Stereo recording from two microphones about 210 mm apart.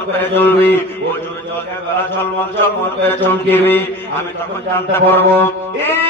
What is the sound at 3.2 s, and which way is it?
Mantra, 10° left (ahead or behind).